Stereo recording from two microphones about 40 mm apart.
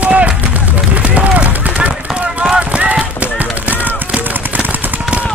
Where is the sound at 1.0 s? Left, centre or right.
Right.